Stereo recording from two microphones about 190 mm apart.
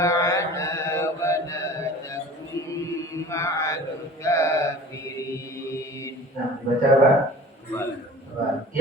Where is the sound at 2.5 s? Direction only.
15° left (ahead or behind).